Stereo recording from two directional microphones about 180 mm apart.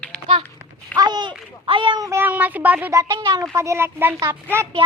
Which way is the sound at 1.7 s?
25° right (ahead or behind).